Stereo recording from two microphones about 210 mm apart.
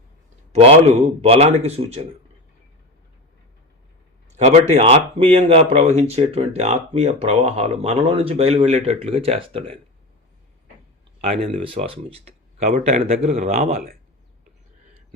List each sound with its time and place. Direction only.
0.5 s speech: 30° right (ahead or behind)
4.4 s speech: 30° right (ahead or behind)
11.2 s speech: 25° right (ahead or behind)